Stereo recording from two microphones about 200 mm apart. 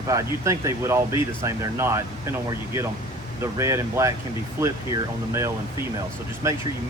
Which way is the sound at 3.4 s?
15° right (ahead or behind).